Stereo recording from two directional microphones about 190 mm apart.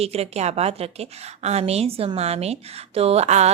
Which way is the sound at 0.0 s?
35° right (ahead or behind).